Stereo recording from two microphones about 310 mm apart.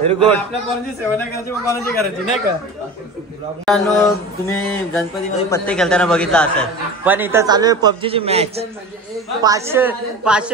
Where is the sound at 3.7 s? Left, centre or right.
Centre.